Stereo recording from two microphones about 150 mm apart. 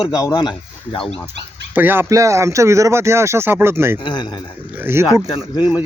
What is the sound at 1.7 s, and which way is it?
Speech, 15° right (ahead or behind).